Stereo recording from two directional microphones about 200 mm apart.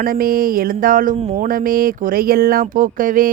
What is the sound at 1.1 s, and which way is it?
Speech, 30° right (ahead or behind).